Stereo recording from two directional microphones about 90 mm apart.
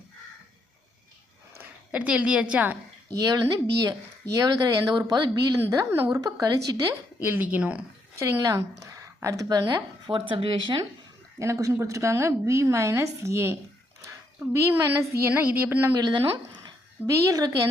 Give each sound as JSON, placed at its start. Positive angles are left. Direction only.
{"t": 1.9, "sound": "a woman's voice", "side_deg": -15}
{"t": 3.2, "sound": "speech", "side_deg": -45}
{"t": 6.2, "sound": "speech", "side_deg": -45}
{"t": 7.2, "sound": "a woman's voice", "side_deg": -20}
{"t": 8.2, "sound": "a woman's voice", "side_deg": -35}
{"t": 9.6, "sound": "speech", "side_deg": -55}
{"t": 11.3, "sound": "a woman's voice", "side_deg": -35}
{"t": 15.3, "sound": "a woman's voice", "side_deg": -20}
{"t": 17.1, "sound": "a woman's voice", "side_deg": -35}